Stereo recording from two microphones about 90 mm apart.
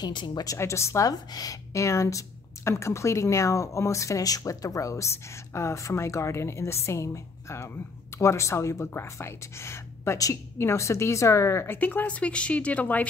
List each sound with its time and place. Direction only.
0.0 s speech: 55° left (ahead or behind)
0.6 s a woman's voice: 30° left (ahead or behind)